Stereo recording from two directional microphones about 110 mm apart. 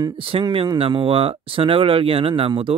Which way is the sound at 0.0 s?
50° right (ahead or behind).